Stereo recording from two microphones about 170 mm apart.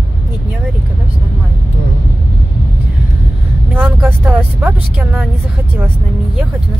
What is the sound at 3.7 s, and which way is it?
Speech, 10° right (ahead or behind).